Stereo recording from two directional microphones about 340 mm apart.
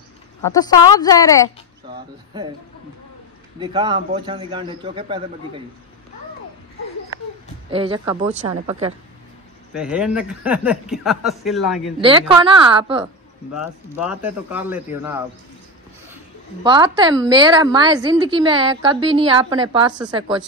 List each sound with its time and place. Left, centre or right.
0.4 s speech: centre
3.5 s a woman's voice: centre
7.7 s a woman's voice: centre
9.8 s speech: centre
12.0 s a woman's voice: centre
13.6 s speech: centre
16.6 s a woman's voice: centre